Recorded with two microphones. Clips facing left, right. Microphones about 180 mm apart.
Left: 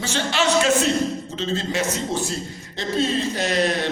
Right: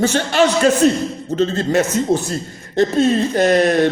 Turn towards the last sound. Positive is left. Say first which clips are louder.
# right 8 dB
turn(degrees=-50)  # may be behind; listen again after turning